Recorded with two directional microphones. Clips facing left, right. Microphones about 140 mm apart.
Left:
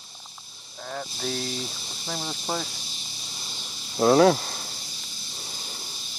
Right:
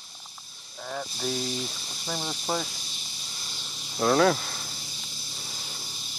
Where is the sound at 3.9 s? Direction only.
25° left (ahead or behind).